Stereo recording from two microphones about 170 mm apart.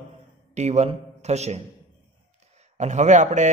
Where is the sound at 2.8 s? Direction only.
45° right (ahead or behind).